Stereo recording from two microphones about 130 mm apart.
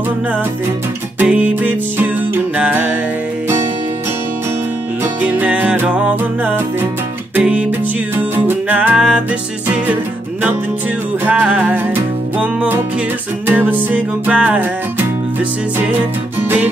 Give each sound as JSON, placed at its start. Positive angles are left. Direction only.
{"t": 1.2, "sound": "music", "side_deg": -10}
{"t": 5.0, "sound": "music", "side_deg": -10}
{"t": 11.2, "sound": "music", "side_deg": -10}
{"t": 16.3, "sound": "music", "side_deg": -15}